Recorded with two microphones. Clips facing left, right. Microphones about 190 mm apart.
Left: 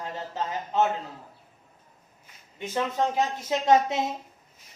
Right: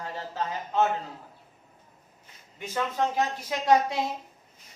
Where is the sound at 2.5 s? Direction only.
20° left (ahead or behind).